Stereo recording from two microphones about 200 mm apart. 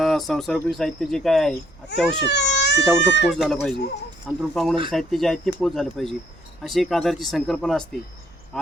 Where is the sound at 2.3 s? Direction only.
60° left (ahead or behind).